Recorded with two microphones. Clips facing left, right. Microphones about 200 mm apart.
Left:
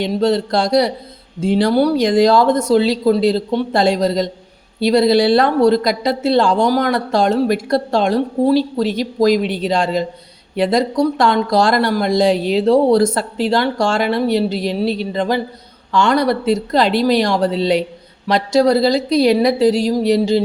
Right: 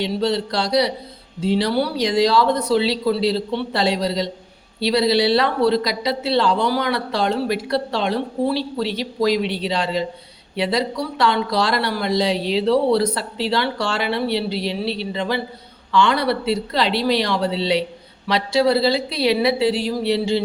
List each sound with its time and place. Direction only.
0.0 s speech: 50° left (ahead or behind)